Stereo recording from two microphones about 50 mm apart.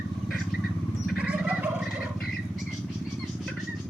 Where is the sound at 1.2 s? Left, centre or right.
Right.